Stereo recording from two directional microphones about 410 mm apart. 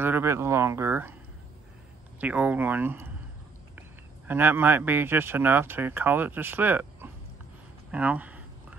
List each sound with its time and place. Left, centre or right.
0.0 s speech: centre
2.1 s speech: centre
4.3 s speech: centre
7.9 s a sound: centre